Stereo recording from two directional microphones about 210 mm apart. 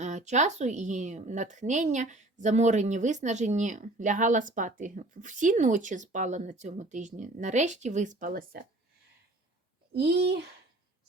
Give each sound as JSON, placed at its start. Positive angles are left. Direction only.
{"t": 0.0, "sound": "speech", "side_deg": -35}
{"t": 9.9, "sound": "a child's voice", "side_deg": -50}